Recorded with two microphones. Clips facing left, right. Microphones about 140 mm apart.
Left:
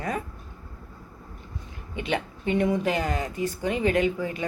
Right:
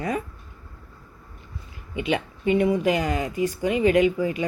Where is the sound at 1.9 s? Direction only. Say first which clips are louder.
Right 3 dB; 10° right (ahead or behind).